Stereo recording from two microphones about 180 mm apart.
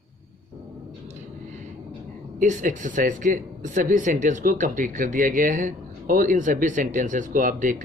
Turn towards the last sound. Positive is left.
turn(degrees=-50)  # may be behind; listen again after turning